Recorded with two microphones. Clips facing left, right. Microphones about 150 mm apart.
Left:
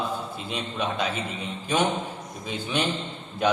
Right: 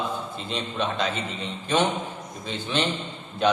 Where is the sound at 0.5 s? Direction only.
5° left (ahead or behind).